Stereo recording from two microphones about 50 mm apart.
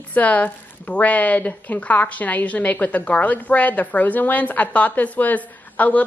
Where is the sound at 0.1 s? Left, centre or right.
Left.